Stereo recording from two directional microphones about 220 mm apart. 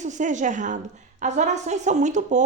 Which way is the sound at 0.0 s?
35° right (ahead or behind).